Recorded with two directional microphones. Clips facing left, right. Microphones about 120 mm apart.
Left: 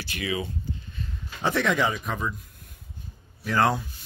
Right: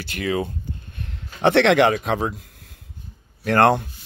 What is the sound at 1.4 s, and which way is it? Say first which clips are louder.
Speech: right 9 dB; 80° right.